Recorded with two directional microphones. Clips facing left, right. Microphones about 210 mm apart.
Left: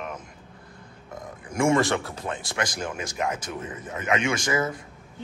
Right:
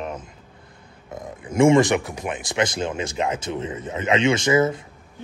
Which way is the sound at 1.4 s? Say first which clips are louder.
Right 6 dB; 20° right (ahead or behind).